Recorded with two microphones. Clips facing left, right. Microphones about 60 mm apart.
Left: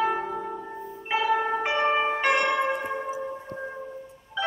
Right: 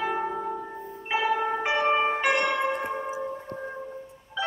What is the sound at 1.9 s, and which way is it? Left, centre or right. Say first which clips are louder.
Music: right 2 dB; centre.